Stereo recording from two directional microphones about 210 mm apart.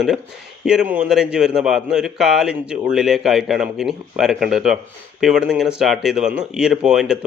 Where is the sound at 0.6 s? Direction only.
5° right (ahead or behind).